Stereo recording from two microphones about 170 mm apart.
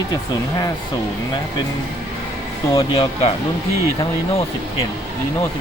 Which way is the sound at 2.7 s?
30° left (ahead or behind).